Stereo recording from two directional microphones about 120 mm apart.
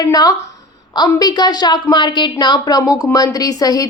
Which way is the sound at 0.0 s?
30° left (ahead or behind).